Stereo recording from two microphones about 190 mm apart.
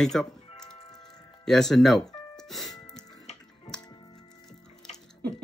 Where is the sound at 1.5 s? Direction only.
Centre (ahead or behind).